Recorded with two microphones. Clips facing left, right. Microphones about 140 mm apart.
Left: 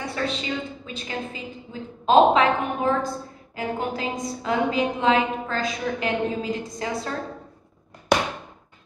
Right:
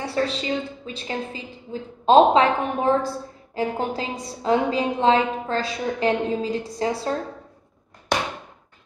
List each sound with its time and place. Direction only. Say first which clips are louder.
0.0 s a woman's voice: right 3 dB; 35° right (ahead or behind)